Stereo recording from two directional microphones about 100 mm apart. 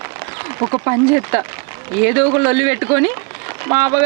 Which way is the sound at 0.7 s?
35° right (ahead or behind).